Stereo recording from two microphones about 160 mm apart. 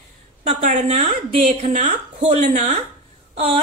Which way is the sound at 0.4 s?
55° right (ahead or behind).